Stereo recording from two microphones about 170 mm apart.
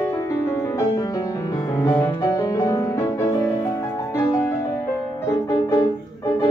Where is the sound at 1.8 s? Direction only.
15° left (ahead or behind).